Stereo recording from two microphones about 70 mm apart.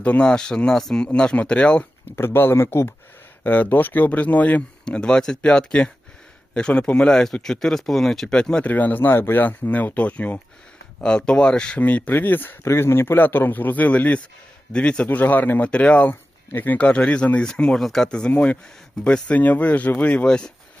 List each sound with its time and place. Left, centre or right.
0.0 s speech: centre
2.0 s speech: left
3.4 s speech: left
8.7 s speech: left